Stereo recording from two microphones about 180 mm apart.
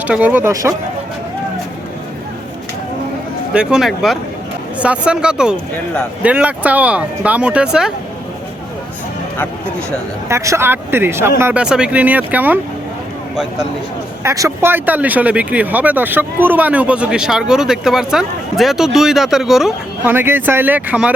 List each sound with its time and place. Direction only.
0.1 s speech: 10° right (ahead or behind)
3.5 s speech: 5° right (ahead or behind)
10.2 s speech: 15° right (ahead or behind)
14.3 s speech: 15° right (ahead or behind)